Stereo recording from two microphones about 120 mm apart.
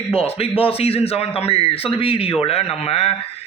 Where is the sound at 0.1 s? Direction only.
55° left (ahead or behind).